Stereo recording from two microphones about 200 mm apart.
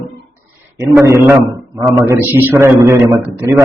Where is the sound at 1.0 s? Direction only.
15° right (ahead or behind).